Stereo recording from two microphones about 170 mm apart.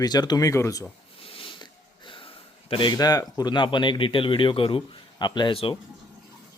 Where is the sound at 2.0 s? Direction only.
30° left (ahead or behind).